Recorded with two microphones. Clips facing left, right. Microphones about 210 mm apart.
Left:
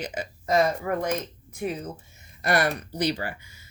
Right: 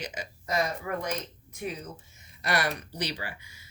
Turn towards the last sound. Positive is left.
turn(degrees=50)  # may be behind; listen again after turning